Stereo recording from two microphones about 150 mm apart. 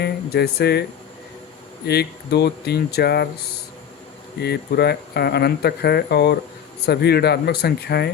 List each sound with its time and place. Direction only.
0.0 s speech: 90° left
1.9 s speech: 90° left
4.4 s speech: 90° left